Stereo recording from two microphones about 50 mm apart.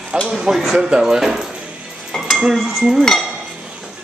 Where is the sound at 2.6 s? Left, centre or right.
Centre.